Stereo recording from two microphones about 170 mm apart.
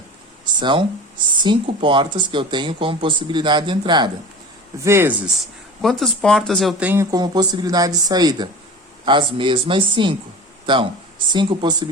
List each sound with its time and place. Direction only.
0.6 s speech: 30° right (ahead or behind)
4.8 s speech: 15° right (ahead or behind)
5.8 s speech: centre (ahead or behind); by 10.2 s 30° right (ahead or behind)
11.3 s speech: 30° right (ahead or behind)